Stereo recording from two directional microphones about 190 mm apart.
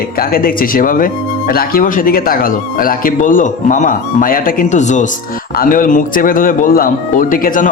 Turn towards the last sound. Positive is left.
turn(degrees=45)  # may be behind; listen again after turning